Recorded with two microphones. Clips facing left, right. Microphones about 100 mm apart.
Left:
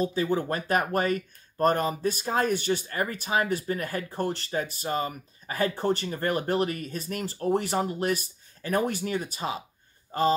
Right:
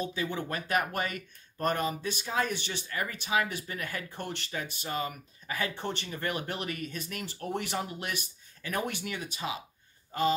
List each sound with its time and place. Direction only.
0.0 s speech: 35° left (ahead or behind)